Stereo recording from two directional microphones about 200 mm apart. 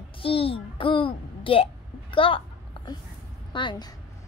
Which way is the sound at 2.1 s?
25° left (ahead or behind).